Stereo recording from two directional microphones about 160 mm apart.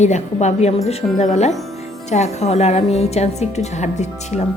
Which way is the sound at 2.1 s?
45° left (ahead or behind).